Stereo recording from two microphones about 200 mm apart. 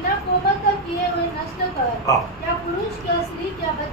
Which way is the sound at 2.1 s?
15° left (ahead or behind).